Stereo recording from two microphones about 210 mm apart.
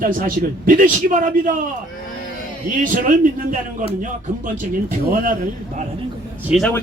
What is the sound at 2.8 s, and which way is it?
A man's voice, 40° right (ahead or behind).